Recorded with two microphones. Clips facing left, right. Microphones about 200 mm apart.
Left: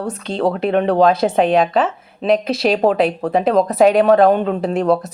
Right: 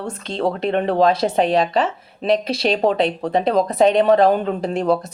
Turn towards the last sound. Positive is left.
turn(degrees=0)  # may be behind; listen again after turning